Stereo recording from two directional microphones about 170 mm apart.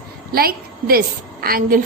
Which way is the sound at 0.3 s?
60° right (ahead or behind).